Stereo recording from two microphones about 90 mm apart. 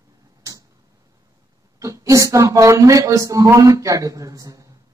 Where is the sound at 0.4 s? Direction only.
40° right (ahead or behind).